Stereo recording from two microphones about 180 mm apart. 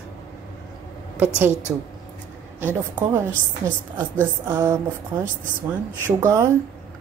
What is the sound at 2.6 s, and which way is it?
Speech, 10° right (ahead or behind).